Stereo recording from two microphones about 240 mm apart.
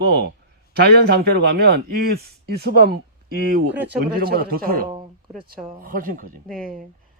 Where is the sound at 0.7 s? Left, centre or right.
Right.